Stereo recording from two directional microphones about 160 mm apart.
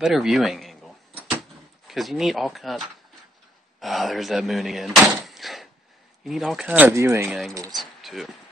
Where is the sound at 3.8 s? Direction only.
Centre (ahead or behind).